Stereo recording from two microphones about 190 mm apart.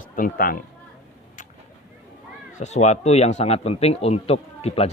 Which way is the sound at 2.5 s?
35° left (ahead or behind).